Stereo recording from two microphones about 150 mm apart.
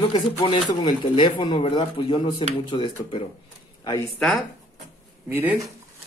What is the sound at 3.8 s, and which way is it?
Speech, 25° left (ahead or behind).